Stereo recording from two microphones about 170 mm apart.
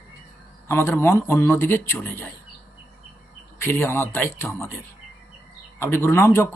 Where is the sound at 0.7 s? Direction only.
15° left (ahead or behind).